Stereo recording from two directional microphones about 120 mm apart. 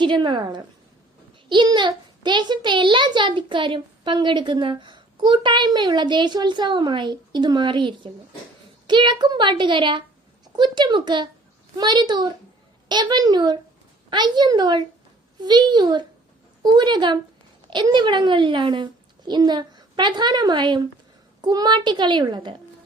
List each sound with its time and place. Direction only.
0.0 s a child's voice: 40° right (ahead or behind)